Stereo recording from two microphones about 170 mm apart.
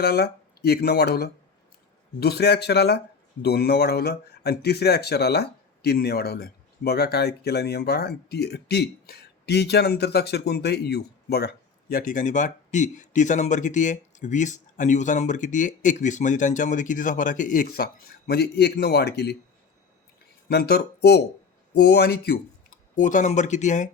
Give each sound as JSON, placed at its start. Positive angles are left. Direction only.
{"t": 0.0, "sound": "speech", "side_deg": 70}
{"t": 20.5, "sound": "speech", "side_deg": 70}
{"t": 23.0, "sound": "speech", "side_deg": 50}